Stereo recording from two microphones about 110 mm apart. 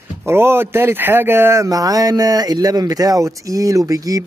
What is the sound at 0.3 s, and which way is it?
Speech, 20° right (ahead or behind).